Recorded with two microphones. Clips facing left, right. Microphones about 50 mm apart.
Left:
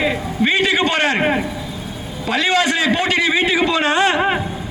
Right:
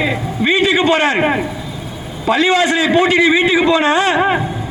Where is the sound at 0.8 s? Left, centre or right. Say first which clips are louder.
Right 4 dB; centre.